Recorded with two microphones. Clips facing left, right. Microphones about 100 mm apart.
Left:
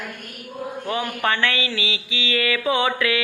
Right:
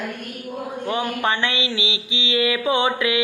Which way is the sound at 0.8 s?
20° right (ahead or behind).